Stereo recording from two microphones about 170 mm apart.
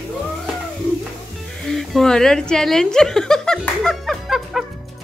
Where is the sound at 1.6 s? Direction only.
Centre (ahead or behind).